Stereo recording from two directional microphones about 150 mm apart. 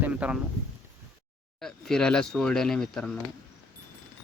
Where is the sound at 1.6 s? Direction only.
5° left (ahead or behind).